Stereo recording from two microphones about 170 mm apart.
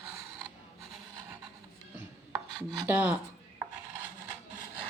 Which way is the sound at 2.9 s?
10° right (ahead or behind).